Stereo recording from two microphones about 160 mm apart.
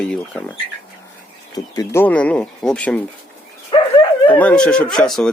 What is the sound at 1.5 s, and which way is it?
Speech, 25° left (ahead or behind).